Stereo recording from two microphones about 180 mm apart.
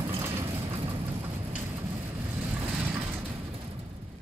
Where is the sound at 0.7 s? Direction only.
30° right (ahead or behind).